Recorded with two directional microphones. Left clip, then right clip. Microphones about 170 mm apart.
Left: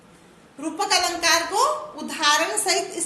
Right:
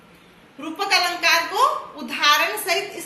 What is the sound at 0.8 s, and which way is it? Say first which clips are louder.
A woman's voice: right 2 dB; 60° left (ahead or behind).